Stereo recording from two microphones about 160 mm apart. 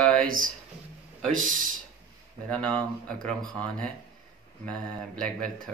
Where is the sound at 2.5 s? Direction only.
5° left (ahead or behind).